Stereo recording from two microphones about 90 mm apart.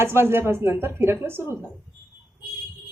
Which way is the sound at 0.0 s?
25° right (ahead or behind).